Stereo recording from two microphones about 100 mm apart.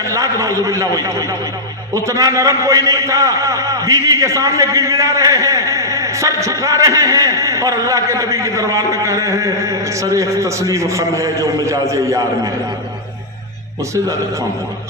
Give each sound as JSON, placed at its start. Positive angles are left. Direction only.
{"t": 0.0, "sound": "a man's voice", "side_deg": -30}